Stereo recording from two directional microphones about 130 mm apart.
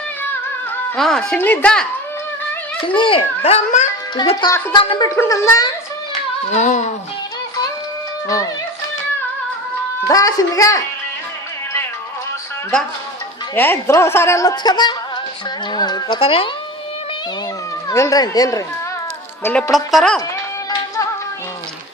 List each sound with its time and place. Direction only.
0.9 s a woman's voice: 5° left (ahead or behind)
2.8 s a child's voice: 40° left (ahead or behind); by 3.8 s 55° left (ahead or behind)
4.2 s speech: 35° left (ahead or behind)
5.1 s a woman's voice: 20° left (ahead or behind)
6.5 s music: 70° left (ahead or behind)
10.1 s a woman's voice: 25° left (ahead or behind)
13.6 s a woman's voice: 20° left (ahead or behind)
15.7 s music: 30° left (ahead or behind)
16.2 s a child's voice: 45° left (ahead or behind)
17.8 s a woman's voice: 25° left (ahead or behind)
19.4 s a woman's voice: 15° left (ahead or behind)
19.7 s a woman's voice: centre (ahead or behind)
20.7 s music: 25° left (ahead or behind)